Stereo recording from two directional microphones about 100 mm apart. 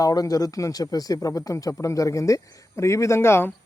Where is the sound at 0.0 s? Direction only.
35° left (ahead or behind).